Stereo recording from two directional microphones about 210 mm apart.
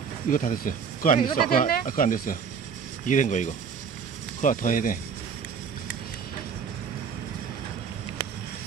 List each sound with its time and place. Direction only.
0.3 s speech: 40° left (ahead or behind)